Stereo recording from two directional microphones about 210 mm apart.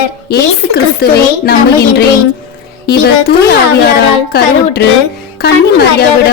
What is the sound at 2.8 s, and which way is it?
A child's voice, 50° left (ahead or behind).